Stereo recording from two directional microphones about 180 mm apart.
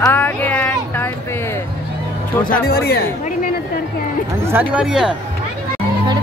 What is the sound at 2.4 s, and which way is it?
Speech, 55° left (ahead or behind).